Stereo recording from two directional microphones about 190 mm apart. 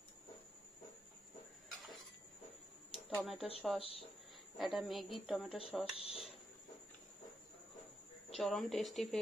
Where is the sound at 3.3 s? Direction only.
30° left (ahead or behind).